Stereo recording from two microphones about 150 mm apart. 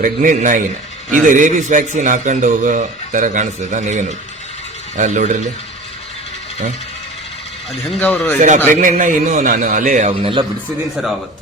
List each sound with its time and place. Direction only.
0.0 s a man's voice: 65° right (ahead or behind)
7.7 s speech: centre (ahead or behind)
8.7 s a man's voice: 60° right (ahead or behind)
10.1 s speech: 35° right (ahead or behind)